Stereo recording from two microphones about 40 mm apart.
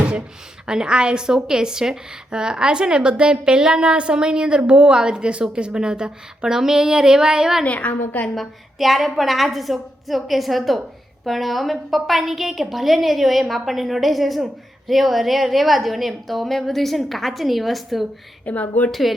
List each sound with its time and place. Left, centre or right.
0.7 s a woman's voice: centre
7.6 s a woman's voice: left
8.4 s a woman's voice: centre
18.4 s a woman's voice: left
18.9 s a woman's voice: centre